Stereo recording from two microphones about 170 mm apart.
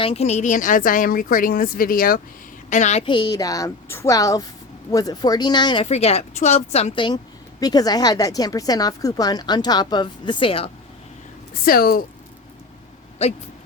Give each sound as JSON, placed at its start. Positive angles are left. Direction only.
{"t": 0.0, "sound": "a woman's voice", "side_deg": 35}
{"t": 2.6, "sound": "a woman's voice", "side_deg": 45}
{"t": 3.1, "sound": "a woman's voice", "side_deg": 25}
{"t": 5.8, "sound": "a woman's voice", "side_deg": 40}
{"t": 11.6, "sound": "a woman's voice", "side_deg": 60}
{"t": 13.2, "sound": "a woman's voice", "side_deg": 35}